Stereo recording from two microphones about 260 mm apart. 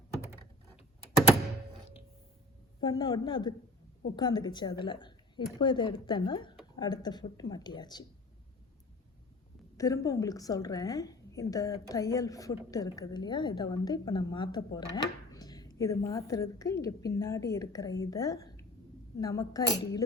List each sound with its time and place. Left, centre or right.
2.8 s a woman's voice: centre
9.7 s a woman's voice: centre